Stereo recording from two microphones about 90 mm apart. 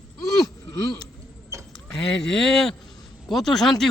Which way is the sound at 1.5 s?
35° right (ahead or behind).